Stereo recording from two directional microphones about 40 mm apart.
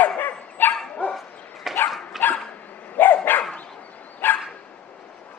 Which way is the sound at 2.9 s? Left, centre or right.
Left.